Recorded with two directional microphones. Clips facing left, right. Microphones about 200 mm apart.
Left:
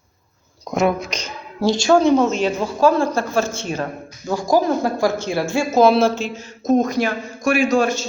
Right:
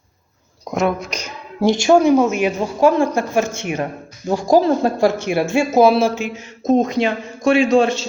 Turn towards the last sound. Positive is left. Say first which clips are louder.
# right 3 dB
turn(degrees=-30)  # may be behind; listen again after turning